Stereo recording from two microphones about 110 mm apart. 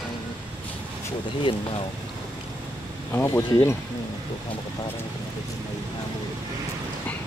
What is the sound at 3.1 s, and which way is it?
Speech, 20° left (ahead or behind).